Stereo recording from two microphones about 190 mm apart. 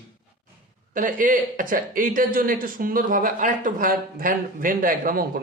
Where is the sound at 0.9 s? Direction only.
45° right (ahead or behind).